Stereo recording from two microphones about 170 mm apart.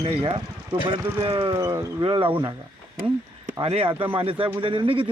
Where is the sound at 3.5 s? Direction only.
35° right (ahead or behind).